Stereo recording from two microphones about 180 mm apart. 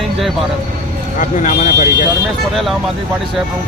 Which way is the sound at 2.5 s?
Centre (ahead or behind).